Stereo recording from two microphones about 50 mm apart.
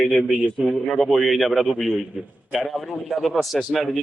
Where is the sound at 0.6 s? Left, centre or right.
Centre.